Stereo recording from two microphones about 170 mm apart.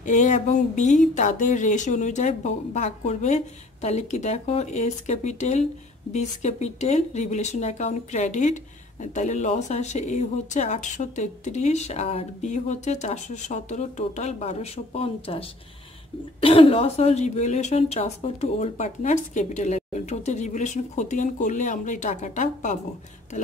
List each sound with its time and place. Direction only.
0.0 s a woman's voice: 45° left (ahead or behind)